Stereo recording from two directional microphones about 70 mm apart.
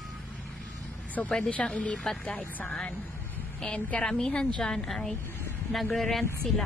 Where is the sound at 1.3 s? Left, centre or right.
Centre.